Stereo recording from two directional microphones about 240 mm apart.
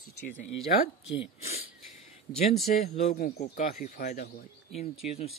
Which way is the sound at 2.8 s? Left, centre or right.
Left.